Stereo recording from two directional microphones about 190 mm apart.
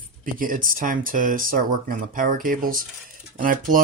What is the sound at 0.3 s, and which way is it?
Speech, 45° right (ahead or behind).